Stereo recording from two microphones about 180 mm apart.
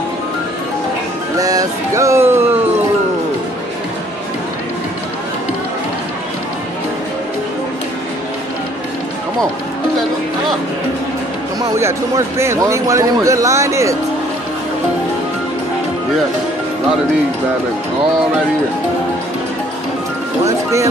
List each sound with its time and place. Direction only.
1.4 s music: 20° right (ahead or behind)
12.4 s speech: 15° right (ahead or behind)